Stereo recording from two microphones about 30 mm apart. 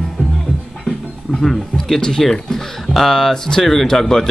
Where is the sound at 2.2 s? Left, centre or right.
Centre.